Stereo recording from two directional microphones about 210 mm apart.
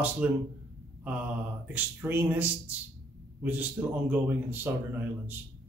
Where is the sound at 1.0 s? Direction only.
5° right (ahead or behind).